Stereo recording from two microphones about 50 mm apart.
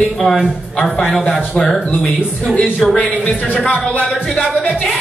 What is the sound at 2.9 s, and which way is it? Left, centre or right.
Speech, left.